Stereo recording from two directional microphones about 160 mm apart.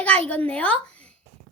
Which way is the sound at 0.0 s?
10° left (ahead or behind).